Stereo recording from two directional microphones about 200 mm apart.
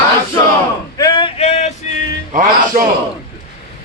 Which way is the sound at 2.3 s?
40° right (ahead or behind).